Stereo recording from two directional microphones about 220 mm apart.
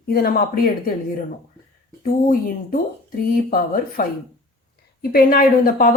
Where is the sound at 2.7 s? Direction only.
40° left (ahead or behind).